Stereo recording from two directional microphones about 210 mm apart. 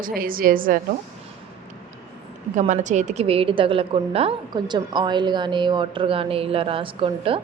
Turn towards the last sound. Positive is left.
turn(degrees=-25)  # may be behind; listen again after turning